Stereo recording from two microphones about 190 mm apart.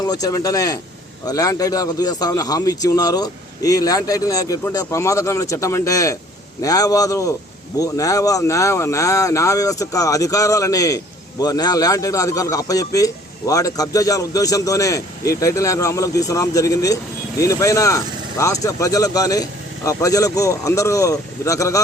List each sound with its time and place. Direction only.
0.0 s a man's voice: 20° left (ahead or behind)